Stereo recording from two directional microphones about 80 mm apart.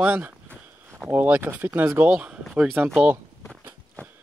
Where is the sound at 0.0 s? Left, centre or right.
Right.